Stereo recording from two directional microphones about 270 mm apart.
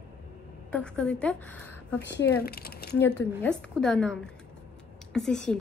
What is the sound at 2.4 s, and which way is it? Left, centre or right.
Speech, left.